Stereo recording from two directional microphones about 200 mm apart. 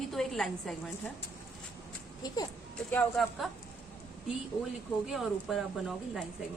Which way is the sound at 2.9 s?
5° left (ahead or behind).